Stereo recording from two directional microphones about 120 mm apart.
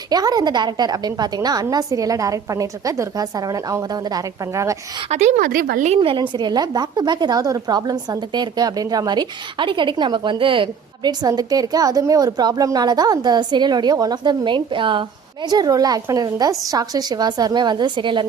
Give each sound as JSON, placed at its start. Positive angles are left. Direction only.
{"t": 0.1, "sound": "a woman's voice", "side_deg": -35}
{"t": 5.0, "sound": "a woman's voice", "side_deg": -75}
{"t": 6.0, "sound": "a woman's voice", "side_deg": -45}